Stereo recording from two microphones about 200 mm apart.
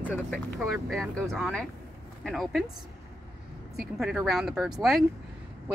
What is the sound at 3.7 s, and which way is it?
Speech, centre (ahead or behind).